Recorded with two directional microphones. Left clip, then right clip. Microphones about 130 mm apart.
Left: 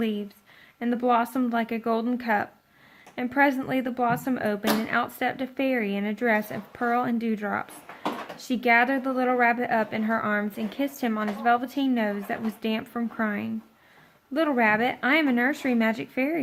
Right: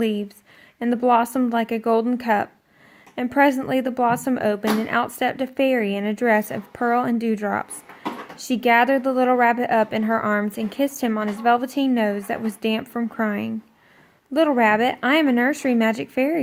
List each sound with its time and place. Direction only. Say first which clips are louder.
0.0 s a woman's voice: right 6 dB; 40° right (ahead or behind)